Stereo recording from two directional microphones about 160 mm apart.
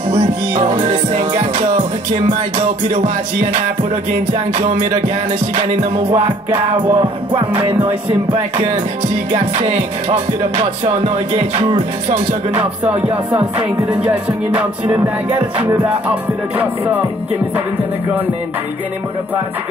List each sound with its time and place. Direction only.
0.7 s music: 50° right (ahead or behind)
2.5 s music: 40° right (ahead or behind)
4.3 s music: 40° right (ahead or behind)
13.0 s music: 10° right (ahead or behind)
14.9 s music: 25° right (ahead or behind)
15.6 s music: 10° right (ahead or behind)